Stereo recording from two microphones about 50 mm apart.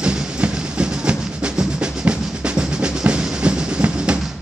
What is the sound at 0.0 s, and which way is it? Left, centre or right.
Music, centre.